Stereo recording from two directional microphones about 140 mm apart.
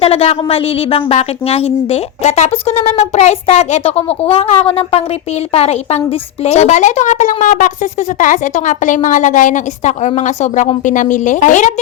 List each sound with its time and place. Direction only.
0.0 s speech: 45° left (ahead or behind); by 11.7 s 65° left (ahead or behind)